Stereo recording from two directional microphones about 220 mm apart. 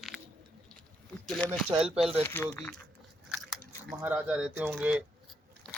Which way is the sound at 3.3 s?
Centre (ahead or behind).